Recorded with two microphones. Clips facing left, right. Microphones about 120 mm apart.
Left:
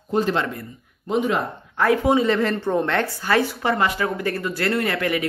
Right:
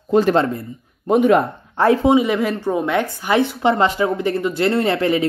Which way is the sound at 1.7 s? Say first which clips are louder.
Right 4 dB; 25° right (ahead or behind).